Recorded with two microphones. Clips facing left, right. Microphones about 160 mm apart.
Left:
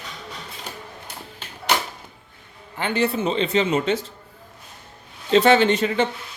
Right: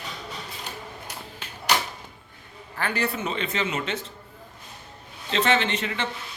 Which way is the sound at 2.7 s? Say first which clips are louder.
Left 5 dB; 25° left (ahead or behind).